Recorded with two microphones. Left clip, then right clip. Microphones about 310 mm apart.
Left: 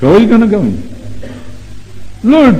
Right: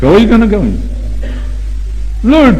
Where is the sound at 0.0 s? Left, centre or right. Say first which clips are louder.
Even; right.